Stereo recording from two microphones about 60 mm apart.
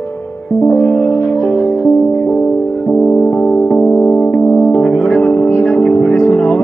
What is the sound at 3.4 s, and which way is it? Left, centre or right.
Music, centre.